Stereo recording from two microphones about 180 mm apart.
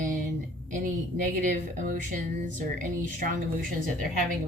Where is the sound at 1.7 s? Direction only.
45° right (ahead or behind).